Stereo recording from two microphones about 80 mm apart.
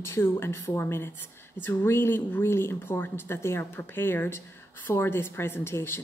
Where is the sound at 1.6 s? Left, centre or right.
Left.